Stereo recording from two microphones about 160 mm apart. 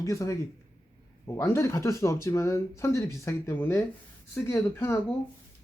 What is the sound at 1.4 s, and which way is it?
Speech, 15° left (ahead or behind).